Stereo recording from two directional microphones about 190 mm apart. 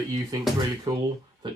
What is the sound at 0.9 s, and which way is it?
Speech, 20° right (ahead or behind).